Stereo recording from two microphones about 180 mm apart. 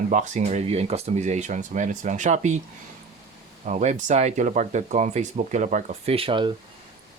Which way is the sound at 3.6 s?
40° right (ahead or behind).